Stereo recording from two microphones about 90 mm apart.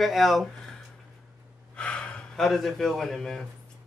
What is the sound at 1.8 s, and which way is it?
A man's voice, 10° left (ahead or behind).